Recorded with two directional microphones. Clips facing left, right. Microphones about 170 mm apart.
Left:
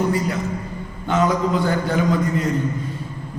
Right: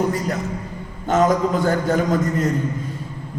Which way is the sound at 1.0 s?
45° right (ahead or behind).